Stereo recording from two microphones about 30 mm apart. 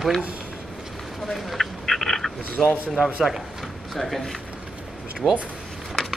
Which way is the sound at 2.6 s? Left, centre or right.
Centre.